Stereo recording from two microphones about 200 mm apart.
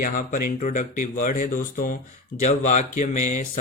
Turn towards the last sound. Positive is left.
turn(degrees=35)  # may be behind; listen again after turning